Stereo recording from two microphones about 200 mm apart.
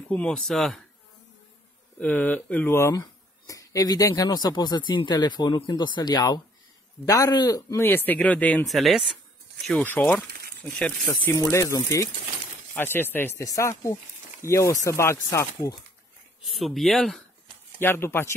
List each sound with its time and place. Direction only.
0.1 s speech: 5° left (ahead or behind)
2.0 s speech: 5° left (ahead or behind)
11.3 s speech: 15° left (ahead or behind)
16.4 s speech: centre (ahead or behind)
17.7 s speech: 10° left (ahead or behind)